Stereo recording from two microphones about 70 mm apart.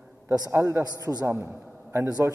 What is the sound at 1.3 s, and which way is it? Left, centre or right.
Speech, right.